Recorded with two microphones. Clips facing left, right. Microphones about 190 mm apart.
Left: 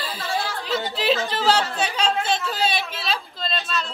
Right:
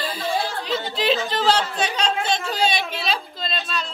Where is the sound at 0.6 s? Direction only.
5° left (ahead or behind).